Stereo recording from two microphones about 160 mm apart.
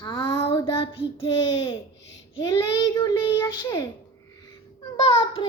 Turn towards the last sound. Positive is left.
turn(degrees=35)  # may be behind; listen again after turning